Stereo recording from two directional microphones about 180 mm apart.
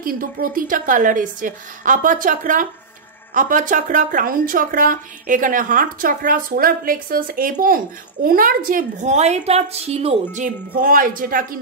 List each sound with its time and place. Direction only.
0.0 s a woman's voice: 50° right (ahead or behind)